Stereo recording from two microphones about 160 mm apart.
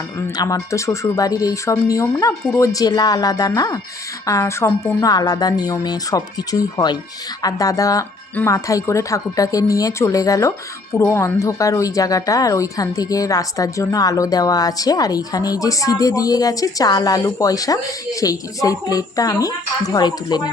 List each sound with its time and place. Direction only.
0.2 s speech: 20° left (ahead or behind)